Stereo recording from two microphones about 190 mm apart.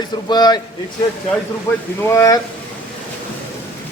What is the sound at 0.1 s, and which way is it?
Speech, 20° left (ahead or behind).